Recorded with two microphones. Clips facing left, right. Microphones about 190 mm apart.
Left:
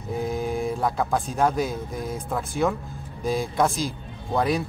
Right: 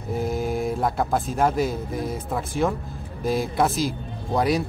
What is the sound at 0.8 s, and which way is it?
Speech, 5° right (ahead or behind).